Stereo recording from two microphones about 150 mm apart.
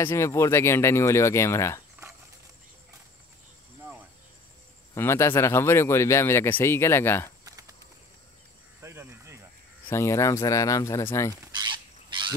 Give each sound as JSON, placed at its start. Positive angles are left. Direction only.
{"t": 0.0, "sound": "speech", "side_deg": 20}
{"t": 4.9, "sound": "speech", "side_deg": 15}
{"t": 7.4, "sound": "a sound", "side_deg": -20}
{"t": 8.8, "sound": "cricket", "side_deg": -15}
{"t": 9.8, "sound": "speech", "side_deg": 20}
{"t": 11.5, "sound": "a sound", "side_deg": -30}